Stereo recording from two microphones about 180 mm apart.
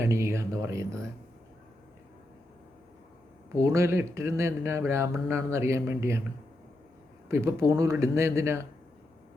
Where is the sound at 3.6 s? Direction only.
15° right (ahead or behind).